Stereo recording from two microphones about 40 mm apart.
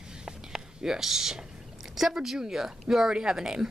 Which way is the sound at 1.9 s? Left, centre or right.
Centre.